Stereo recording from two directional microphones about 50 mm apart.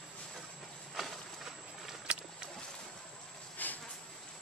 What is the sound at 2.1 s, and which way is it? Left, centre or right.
Boat, right.